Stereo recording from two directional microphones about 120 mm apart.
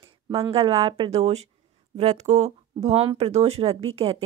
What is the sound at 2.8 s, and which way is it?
A woman's voice, 55° right (ahead or behind).